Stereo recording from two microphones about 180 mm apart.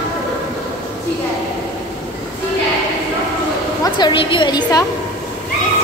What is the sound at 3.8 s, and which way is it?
A woman's voice, 25° left (ahead or behind).